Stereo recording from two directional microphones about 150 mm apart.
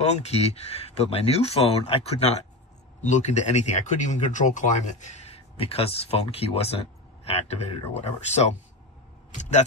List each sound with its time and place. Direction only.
0.0 s speech: 45° left (ahead or behind)